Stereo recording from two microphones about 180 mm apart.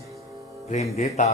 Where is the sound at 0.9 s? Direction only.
35° left (ahead or behind).